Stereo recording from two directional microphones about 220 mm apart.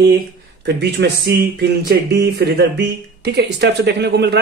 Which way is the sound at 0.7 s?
50° right (ahead or behind).